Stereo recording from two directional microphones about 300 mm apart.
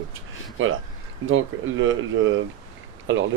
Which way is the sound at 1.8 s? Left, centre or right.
Right.